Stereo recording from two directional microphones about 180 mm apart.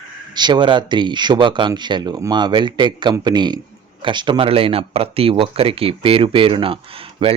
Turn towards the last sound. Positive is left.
turn(degrees=-30)  # may be behind; listen again after turning